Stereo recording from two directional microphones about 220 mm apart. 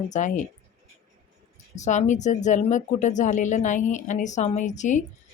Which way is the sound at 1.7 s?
30° left (ahead or behind).